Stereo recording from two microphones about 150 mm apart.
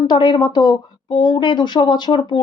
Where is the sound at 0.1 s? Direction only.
35° left (ahead or behind).